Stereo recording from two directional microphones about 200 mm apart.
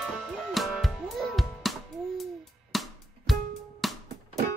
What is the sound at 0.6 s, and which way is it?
Music, centre (ahead or behind).